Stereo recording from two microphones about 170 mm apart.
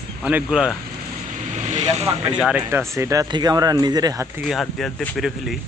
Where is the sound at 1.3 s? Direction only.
45° right (ahead or behind).